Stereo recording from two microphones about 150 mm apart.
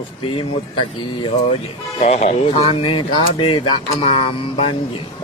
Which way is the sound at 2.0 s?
50° left (ahead or behind).